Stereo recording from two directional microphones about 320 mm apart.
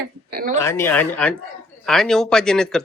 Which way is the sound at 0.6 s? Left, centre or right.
Centre.